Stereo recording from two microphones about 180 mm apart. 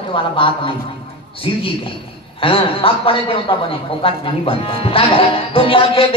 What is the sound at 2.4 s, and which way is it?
A man's voice, 30° left (ahead or behind).